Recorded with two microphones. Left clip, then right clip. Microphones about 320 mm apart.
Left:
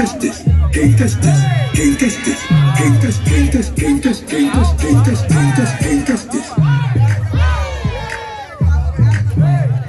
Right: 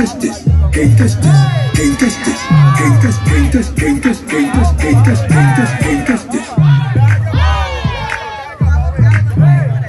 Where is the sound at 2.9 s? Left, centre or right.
Right.